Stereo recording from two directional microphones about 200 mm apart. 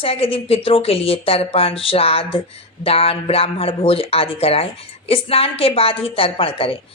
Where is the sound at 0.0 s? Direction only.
30° left (ahead or behind).